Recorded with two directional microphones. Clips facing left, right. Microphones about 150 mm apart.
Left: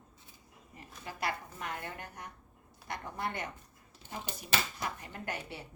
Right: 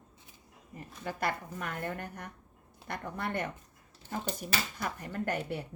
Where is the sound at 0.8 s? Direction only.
50° right (ahead or behind).